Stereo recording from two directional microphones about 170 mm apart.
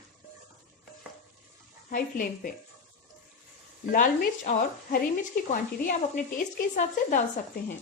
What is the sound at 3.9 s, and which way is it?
Speech, 50° left (ahead or behind).